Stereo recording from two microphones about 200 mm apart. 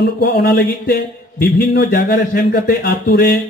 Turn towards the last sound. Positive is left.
turn(degrees=50)  # may be behind; listen again after turning